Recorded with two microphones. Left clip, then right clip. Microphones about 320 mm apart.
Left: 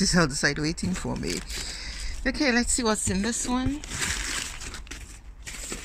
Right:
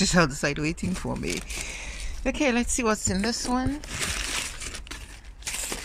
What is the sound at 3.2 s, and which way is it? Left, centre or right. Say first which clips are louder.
Speech: right 2 dB; right.